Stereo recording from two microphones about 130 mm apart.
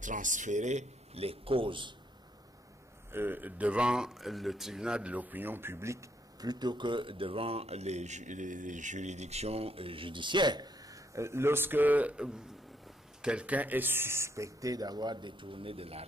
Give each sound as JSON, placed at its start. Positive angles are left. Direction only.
{"t": 0.0, "sound": "speech", "side_deg": -80}
{"t": 3.1, "sound": "speech", "side_deg": -15}